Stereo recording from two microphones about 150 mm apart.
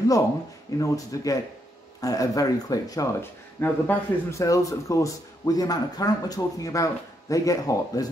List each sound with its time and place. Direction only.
0.7 s speech: 20° left (ahead or behind)